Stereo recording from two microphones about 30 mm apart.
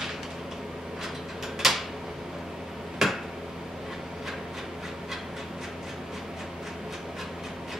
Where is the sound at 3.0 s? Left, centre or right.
Centre.